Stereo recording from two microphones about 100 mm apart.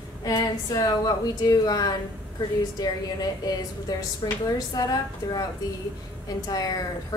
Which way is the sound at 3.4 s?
40° left (ahead or behind).